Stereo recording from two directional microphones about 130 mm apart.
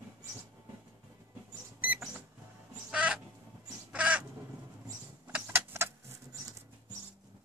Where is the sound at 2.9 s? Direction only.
10° right (ahead or behind).